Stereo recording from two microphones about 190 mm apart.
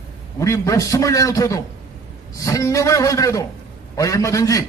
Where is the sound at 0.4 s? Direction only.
15° left (ahead or behind).